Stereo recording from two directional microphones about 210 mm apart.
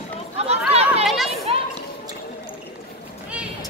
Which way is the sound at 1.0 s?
Centre (ahead or behind).